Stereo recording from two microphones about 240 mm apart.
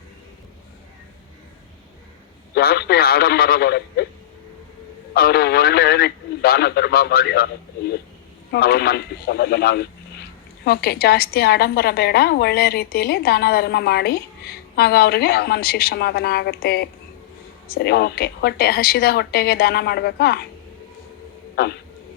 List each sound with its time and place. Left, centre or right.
2.6 s a woman's voice: left
5.1 s a woman's voice: left
21.5 s speech: left